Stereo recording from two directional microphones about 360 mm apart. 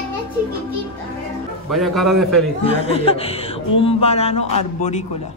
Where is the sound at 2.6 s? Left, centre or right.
Centre.